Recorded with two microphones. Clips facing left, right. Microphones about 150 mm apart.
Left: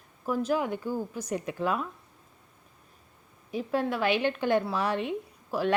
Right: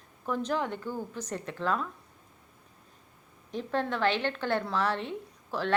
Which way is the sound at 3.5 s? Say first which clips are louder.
Left 2 dB; 10° left (ahead or behind).